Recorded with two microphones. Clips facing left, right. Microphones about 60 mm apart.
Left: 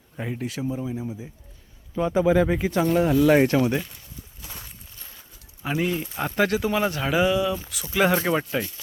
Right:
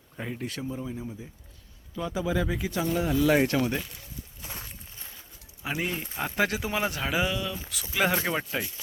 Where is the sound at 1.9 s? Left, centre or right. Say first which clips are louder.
Left 9 dB; left.